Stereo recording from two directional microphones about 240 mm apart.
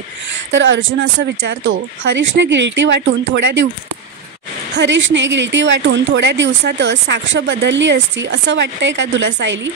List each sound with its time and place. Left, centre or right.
0.5 s speech: right
4.7 s speech: right